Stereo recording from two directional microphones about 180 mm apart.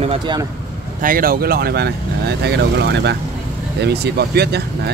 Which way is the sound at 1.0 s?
50° right (ahead or behind).